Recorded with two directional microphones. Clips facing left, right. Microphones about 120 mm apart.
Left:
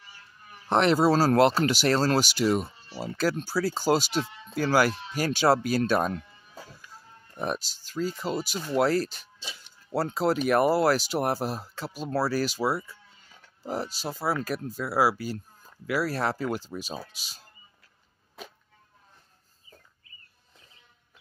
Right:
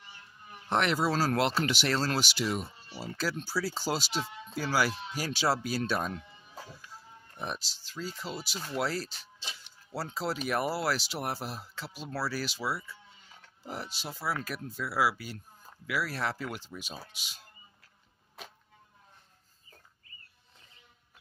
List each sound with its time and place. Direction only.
0.0 s a sound: 20° right (ahead or behind)
0.7 s speech: 35° left (ahead or behind); by 6.2 s 55° left (ahead or behind)
7.3 s speech: 50° left (ahead or behind)